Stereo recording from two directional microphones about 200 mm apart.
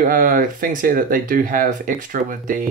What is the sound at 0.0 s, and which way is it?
Speech, 45° right (ahead or behind).